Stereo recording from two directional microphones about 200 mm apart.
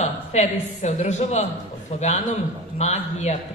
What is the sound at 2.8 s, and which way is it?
Speech, 35° left (ahead or behind).